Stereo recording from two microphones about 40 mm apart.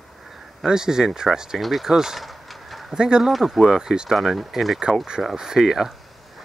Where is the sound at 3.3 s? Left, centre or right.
Centre.